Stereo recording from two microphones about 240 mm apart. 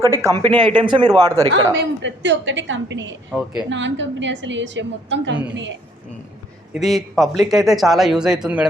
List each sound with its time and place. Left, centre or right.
0.0 s speech: centre
1.8 s a woman's voice: right
6.8 s speech: centre